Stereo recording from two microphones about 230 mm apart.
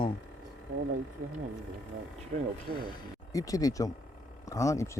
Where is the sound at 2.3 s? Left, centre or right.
Right.